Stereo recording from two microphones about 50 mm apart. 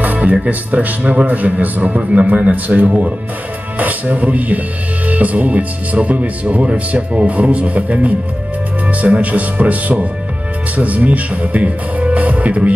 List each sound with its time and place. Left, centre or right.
0.0 s speech: right